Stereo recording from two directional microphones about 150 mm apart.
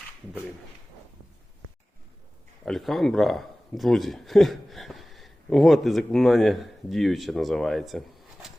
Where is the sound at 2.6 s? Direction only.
Centre (ahead or behind).